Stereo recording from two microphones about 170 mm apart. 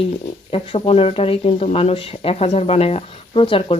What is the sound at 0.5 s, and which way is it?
Speech, 35° left (ahead or behind).